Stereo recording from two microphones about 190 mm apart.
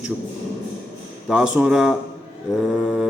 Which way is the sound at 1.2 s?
5° right (ahead or behind).